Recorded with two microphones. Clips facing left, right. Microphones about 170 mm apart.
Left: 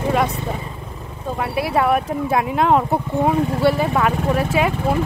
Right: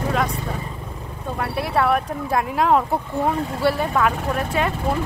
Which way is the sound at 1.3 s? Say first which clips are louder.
Left 2 dB; 5° left (ahead or behind).